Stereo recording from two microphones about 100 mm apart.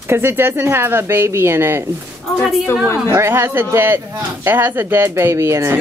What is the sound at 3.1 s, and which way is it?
A man's voice, 25° right (ahead or behind).